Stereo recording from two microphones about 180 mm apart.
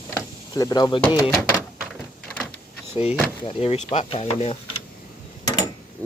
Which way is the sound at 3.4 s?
35° left (ahead or behind).